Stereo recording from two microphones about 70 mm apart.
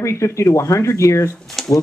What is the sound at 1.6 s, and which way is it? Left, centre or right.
Speech, centre.